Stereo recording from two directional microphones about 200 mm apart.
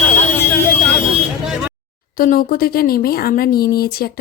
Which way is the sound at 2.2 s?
45° left (ahead or behind).